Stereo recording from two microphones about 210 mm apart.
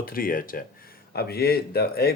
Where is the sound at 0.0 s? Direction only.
45° left (ahead or behind).